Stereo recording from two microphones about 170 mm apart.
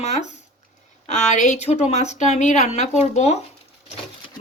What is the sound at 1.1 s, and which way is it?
A woman's voice, 45° left (ahead or behind).